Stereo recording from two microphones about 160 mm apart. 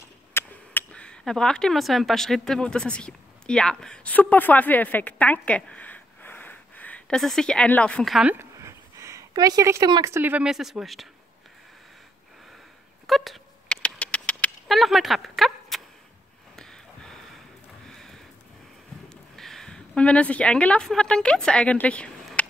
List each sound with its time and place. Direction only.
0.3 s speech: 15° left (ahead or behind)
8.3 s a sound: 15° right (ahead or behind)
10.1 s speech: 10° right (ahead or behind)
13.0 s a sound: centre (ahead or behind)
17.8 s sniff: 5° left (ahead or behind)
19.3 s a woman's voice: 5° left (ahead or behind)